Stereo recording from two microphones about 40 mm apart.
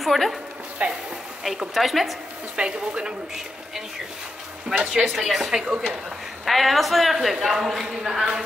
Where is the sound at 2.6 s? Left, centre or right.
Right.